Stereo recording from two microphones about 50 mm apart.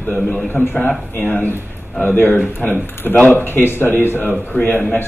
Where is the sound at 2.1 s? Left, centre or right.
Left.